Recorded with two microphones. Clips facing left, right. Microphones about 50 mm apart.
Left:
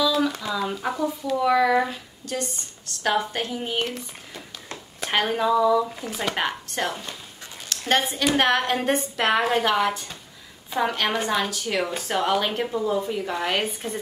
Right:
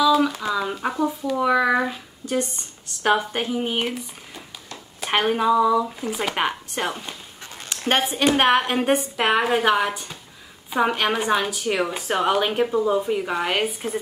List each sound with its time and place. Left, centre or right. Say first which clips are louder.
0.0 s a sound: right 4 dB; centre
1.3 s a woman's voice: even; centre
5.0 s a woman's voice: right 3 dB; centre
6.3 s a woman's voice: right 2 dB; centre
7.7 s a sound: right 1 dB; right
8.3 s a woman's voice: right 2 dB; right
12.9 s a woman's voice: right 3 dB; centre